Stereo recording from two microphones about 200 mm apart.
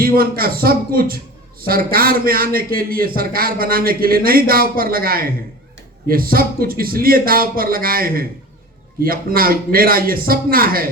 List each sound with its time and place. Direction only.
0.0 s a man's voice: 45° right (ahead or behind)